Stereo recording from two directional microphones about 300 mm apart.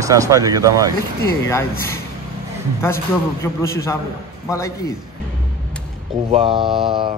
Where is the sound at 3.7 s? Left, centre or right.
Centre.